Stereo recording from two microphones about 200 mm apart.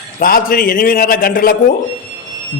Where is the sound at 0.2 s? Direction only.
45° left (ahead or behind).